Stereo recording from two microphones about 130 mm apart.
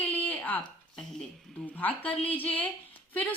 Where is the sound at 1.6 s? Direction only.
10° left (ahead or behind).